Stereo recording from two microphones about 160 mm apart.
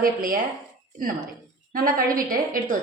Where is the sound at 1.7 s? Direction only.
60° right (ahead or behind).